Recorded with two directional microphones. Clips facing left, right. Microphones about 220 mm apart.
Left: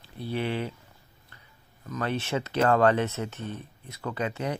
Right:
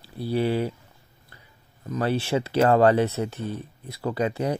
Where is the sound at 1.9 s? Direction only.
30° right (ahead or behind).